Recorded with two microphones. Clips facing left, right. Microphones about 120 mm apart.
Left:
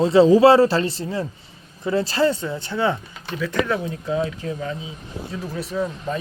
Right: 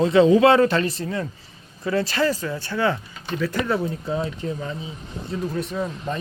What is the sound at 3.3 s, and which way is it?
Speech, centre (ahead or behind).